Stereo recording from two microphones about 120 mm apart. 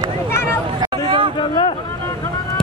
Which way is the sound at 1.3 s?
40° left (ahead or behind).